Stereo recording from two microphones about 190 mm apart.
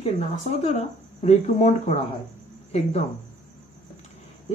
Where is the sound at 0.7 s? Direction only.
35° left (ahead or behind).